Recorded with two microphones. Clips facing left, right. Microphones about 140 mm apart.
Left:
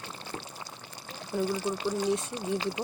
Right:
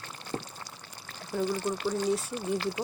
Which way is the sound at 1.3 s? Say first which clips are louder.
Even; 5° left (ahead or behind).